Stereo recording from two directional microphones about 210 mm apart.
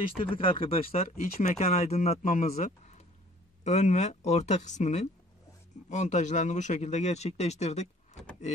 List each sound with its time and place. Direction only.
0.2 s speech: 25° left (ahead or behind)